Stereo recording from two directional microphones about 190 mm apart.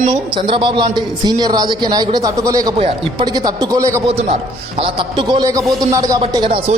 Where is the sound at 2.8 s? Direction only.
30° right (ahead or behind).